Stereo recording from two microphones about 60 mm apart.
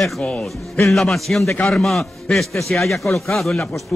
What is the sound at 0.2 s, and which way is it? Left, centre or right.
Speech, centre.